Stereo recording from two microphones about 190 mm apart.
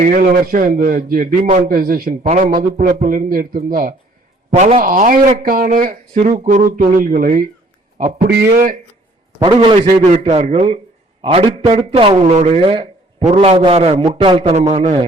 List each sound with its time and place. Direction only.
0.0 s a man's voice: 45° right (ahead or behind)
9.4 s a man's voice: 25° right (ahead or behind)
10.0 s a man's voice: 35° right (ahead or behind)